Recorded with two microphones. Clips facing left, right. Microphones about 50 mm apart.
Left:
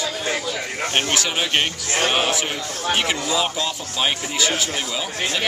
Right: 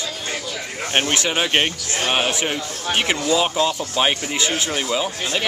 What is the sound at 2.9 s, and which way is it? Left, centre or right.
Speech, centre.